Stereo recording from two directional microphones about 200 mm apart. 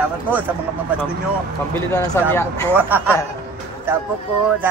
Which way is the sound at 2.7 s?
10° right (ahead or behind).